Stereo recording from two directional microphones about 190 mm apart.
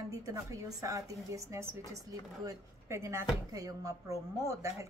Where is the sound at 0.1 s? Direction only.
15° right (ahead or behind).